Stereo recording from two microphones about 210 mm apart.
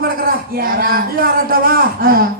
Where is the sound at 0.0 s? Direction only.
45° right (ahead or behind).